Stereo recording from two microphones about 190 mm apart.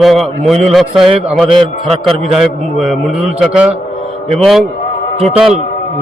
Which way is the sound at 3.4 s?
5° right (ahead or behind).